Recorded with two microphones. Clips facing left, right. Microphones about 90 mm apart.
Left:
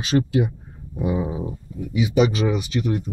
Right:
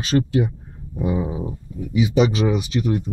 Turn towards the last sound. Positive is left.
turn(degrees=-5)  # may be behind; listen again after turning